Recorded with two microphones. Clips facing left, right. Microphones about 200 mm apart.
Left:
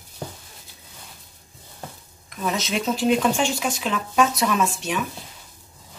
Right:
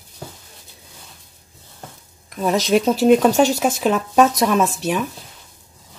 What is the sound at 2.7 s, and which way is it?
Speech, 45° right (ahead or behind).